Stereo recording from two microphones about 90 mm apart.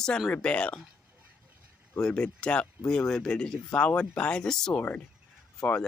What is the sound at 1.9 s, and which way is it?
Speech, 10° left (ahead or behind).